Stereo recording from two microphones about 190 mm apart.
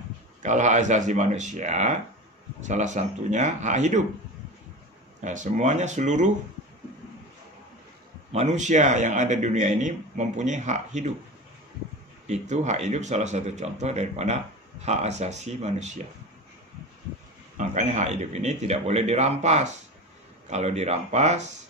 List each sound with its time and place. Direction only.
0.4 s speech: 40° right (ahead or behind)
5.2 s speech: 40° right (ahead or behind)
8.3 s speech: 35° right (ahead or behind)
12.3 s speech: 35° right (ahead or behind)
17.6 s speech: 40° right (ahead or behind)